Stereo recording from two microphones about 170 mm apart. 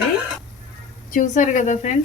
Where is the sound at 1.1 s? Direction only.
50° left (ahead or behind).